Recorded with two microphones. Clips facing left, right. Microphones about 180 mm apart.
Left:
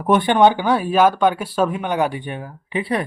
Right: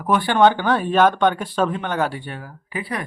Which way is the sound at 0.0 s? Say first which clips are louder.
Left 2 dB; 20° left (ahead or behind).